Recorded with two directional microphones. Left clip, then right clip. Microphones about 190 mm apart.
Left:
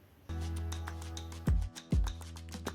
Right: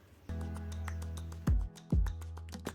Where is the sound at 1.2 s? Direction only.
Centre (ahead or behind).